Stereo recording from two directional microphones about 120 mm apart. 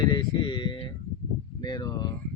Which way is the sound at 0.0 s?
35° left (ahead or behind).